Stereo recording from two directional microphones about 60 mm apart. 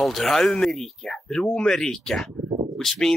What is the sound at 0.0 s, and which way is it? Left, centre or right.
Speech, centre.